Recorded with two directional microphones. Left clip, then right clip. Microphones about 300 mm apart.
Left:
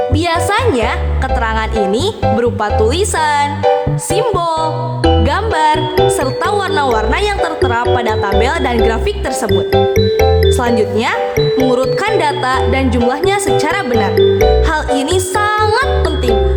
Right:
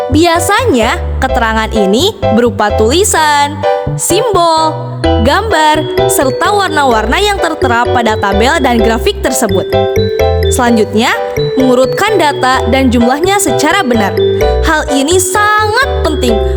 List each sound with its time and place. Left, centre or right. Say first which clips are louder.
0.1 s speech: right 5 dB; right
9.5 s speech: right 1 dB; centre
10.6 s speech: right 4 dB; right
14.7 s music: right 4 dB; right